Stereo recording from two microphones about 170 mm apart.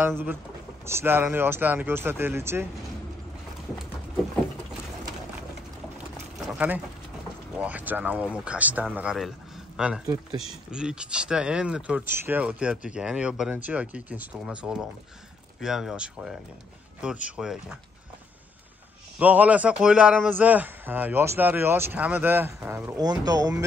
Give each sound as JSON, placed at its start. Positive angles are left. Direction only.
{"t": 0.8, "sound": "speech", "side_deg": -15}
{"t": 6.4, "sound": "a sound", "side_deg": -10}
{"t": 7.5, "sound": "speech", "side_deg": -10}
{"t": 19.1, "sound": "speech", "side_deg": -10}